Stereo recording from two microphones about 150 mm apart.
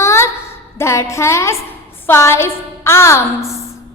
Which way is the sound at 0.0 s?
20° left (ahead or behind).